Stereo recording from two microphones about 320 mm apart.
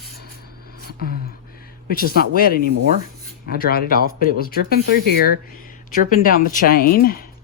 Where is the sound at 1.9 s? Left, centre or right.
Left.